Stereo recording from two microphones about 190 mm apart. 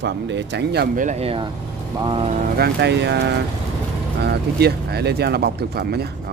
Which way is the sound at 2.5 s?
60° right (ahead or behind).